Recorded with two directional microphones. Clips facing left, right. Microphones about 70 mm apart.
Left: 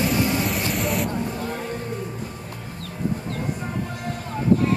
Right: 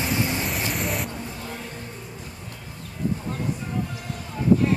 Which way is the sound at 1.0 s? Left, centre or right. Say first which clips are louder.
Left 7 dB; left.